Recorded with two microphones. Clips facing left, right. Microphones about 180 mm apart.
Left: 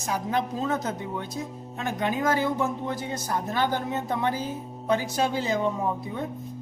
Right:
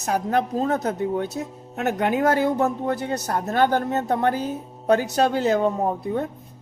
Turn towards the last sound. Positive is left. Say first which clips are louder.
# right 5 dB
turn(degrees=-55)  # may be behind; listen again after turning